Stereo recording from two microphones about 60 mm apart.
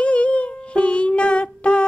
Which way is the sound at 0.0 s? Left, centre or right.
Left.